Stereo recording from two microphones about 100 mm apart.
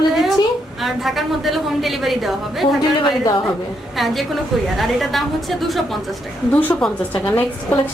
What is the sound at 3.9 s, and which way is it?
A woman's voice, centre (ahead or behind).